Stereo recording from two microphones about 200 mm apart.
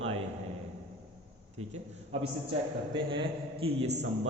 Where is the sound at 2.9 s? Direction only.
25° right (ahead or behind).